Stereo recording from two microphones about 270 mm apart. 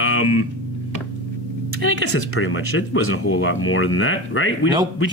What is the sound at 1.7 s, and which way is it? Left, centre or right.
A man's voice, left.